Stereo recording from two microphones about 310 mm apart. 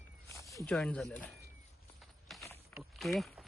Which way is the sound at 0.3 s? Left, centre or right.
Centre.